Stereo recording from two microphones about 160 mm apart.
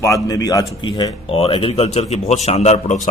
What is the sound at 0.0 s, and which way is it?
A man's voice, 20° left (ahead or behind).